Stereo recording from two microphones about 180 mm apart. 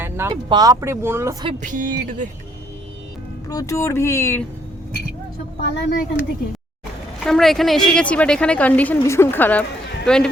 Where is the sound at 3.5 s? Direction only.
20° left (ahead or behind).